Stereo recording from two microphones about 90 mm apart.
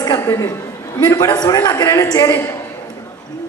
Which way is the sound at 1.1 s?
50° left (ahead or behind).